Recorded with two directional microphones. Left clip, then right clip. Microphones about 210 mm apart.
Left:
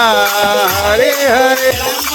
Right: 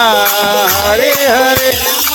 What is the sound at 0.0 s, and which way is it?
Music, centre (ahead or behind).